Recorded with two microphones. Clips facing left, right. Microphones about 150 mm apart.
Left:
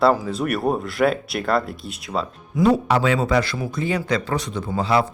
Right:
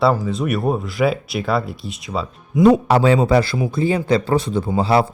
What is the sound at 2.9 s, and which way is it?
Speech, 35° right (ahead or behind).